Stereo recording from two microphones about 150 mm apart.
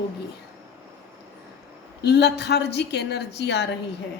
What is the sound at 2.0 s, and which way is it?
A woman's voice, 90° left.